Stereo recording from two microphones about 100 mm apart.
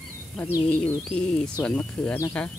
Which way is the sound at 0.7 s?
10° left (ahead or behind).